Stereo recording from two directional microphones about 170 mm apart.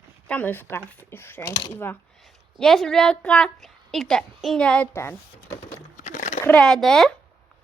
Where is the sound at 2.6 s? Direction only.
5° left (ahead or behind).